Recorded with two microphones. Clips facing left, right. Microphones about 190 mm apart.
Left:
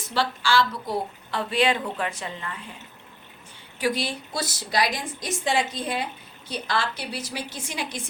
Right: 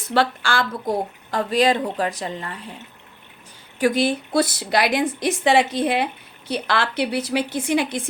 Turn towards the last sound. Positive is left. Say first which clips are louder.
# right 12 dB
turn(degrees=-60)  # may be behind; listen again after turning